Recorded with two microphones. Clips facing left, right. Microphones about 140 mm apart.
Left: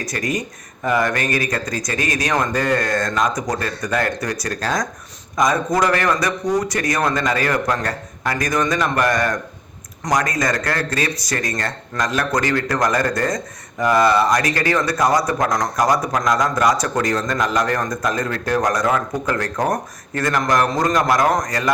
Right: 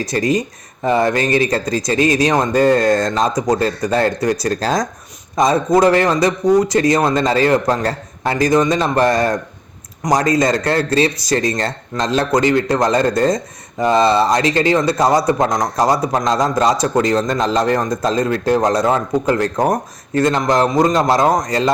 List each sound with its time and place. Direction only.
0.0 s speech: 25° right (ahead or behind)